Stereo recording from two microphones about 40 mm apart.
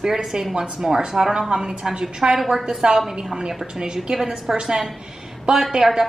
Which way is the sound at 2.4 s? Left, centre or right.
Centre.